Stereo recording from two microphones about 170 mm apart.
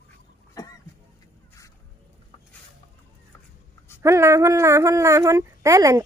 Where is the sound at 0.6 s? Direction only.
20° left (ahead or behind).